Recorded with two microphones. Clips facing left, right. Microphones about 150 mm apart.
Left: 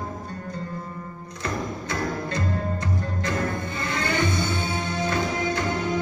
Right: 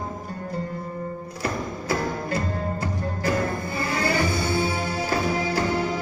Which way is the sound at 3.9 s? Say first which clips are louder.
Right 1 dB; 30° right (ahead or behind).